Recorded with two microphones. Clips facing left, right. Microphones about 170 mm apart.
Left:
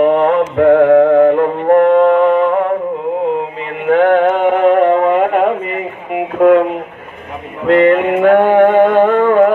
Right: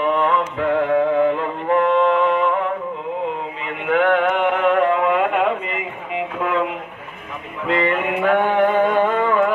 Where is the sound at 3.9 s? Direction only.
40° left (ahead or behind).